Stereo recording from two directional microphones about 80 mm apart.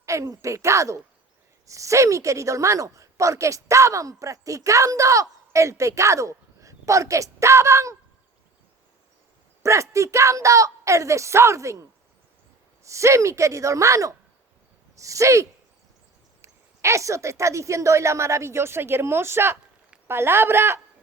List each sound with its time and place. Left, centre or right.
0.0 s speech: right
9.6 s speech: right